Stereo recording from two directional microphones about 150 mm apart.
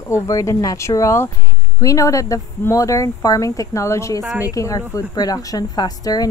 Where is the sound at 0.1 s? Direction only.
20° left (ahead or behind).